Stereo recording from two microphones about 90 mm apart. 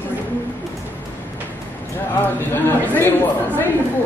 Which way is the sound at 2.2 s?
20° left (ahead or behind).